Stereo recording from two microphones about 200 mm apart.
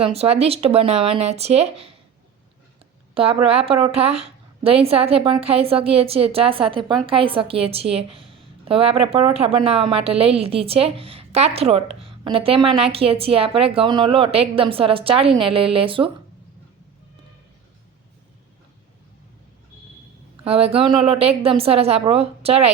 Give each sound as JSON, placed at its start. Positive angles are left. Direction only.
{"t": 0.0, "sound": "speech", "side_deg": -30}
{"t": 3.4, "sound": "a woman's voice", "side_deg": -30}
{"t": 20.4, "sound": "a woman's voice", "side_deg": -30}